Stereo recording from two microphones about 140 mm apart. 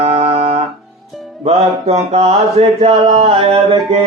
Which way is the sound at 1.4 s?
50° right (ahead or behind).